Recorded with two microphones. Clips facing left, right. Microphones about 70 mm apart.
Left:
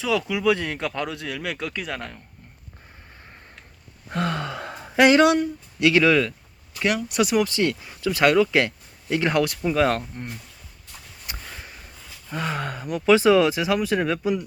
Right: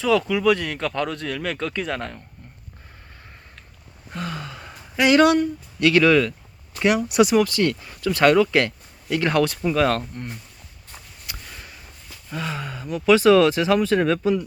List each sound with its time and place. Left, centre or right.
0.0 s speech: centre
4.1 s gasp: left
4.7 s a sound: left
5.1 s speech: centre
6.7 s speech: centre
7.3 s speech: centre
9.7 s speech: centre
11.3 s a sound: left
12.3 s speech: left
13.1 s speech: left